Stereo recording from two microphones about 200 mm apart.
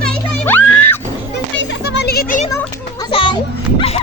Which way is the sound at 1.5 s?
65° left (ahead or behind).